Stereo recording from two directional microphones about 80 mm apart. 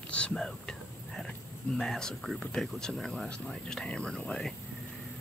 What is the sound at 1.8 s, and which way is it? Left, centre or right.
Speech, centre.